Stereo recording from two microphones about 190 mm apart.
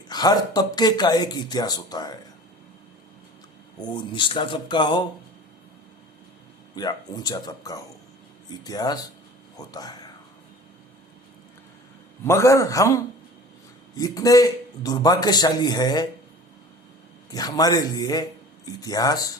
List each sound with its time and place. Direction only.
0.1 s a man's voice: 20° left (ahead or behind)
3.8 s a man's voice: 25° left (ahead or behind)
6.7 s a man's voice: 20° left (ahead or behind)
12.2 s a man's voice: 15° left (ahead or behind)
17.3 s a man's voice: 20° left (ahead or behind)